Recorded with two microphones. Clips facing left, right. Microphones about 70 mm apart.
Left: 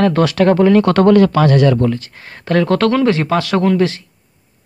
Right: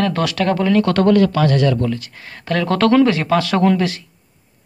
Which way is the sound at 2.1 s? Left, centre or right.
Centre.